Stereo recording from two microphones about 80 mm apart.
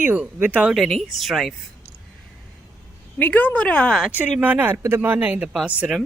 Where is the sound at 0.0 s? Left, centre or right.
Right.